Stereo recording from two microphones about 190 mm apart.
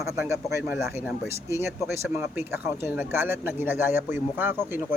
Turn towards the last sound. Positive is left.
turn(degrees=-10)  # may be behind; listen again after turning